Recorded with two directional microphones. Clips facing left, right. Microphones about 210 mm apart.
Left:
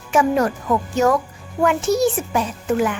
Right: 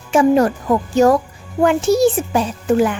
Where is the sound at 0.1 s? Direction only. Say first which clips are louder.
Right 5 dB; 30° right (ahead or behind).